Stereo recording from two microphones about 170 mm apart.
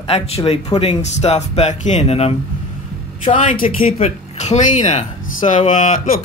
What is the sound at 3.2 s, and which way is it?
Speech, 50° left (ahead or behind).